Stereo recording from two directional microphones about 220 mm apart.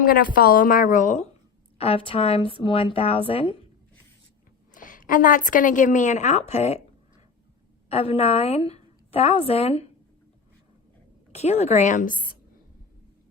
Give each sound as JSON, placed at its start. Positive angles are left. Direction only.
{"t": 0.0, "sound": "a woman's voice", "side_deg": 40}
{"t": 4.7, "sound": "a woman's voice", "side_deg": 35}
{"t": 7.9, "sound": "a woman's voice", "side_deg": 30}
{"t": 11.3, "sound": "a woman's voice", "side_deg": 30}